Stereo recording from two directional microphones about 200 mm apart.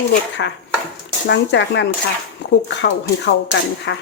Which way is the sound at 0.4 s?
65° left (ahead or behind).